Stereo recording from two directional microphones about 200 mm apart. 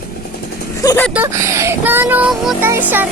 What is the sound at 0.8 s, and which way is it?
Speech, 15° left (ahead or behind).